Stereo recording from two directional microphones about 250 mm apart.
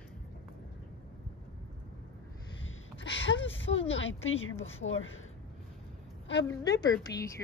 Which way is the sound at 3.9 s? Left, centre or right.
Left.